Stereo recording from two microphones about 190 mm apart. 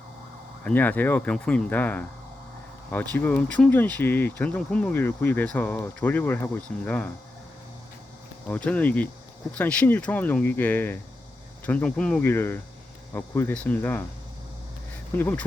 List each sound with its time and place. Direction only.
0.6 s speech: 10° left (ahead or behind)
8.4 s speech: 5° left (ahead or behind)
15.1 s speech: 10° left (ahead or behind)